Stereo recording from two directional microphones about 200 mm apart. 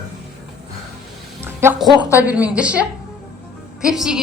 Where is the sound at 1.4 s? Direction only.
10° right (ahead or behind).